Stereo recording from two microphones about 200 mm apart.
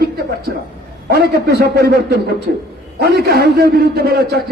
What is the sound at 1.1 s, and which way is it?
A man's voice, 50° right (ahead or behind).